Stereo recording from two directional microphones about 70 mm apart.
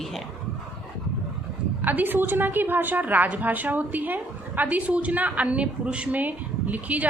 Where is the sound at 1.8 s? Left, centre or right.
Right.